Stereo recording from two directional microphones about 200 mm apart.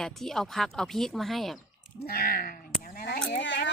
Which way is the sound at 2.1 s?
45° left (ahead or behind).